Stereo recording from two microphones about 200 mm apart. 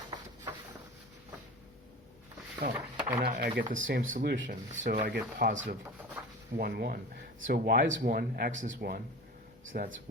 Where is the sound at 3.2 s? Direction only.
55° right (ahead or behind).